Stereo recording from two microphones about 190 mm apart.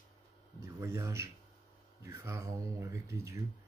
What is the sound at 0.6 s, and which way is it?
Speech, 15° right (ahead or behind).